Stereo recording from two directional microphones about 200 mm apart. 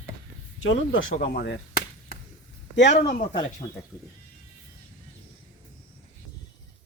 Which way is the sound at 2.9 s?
35° left (ahead or behind).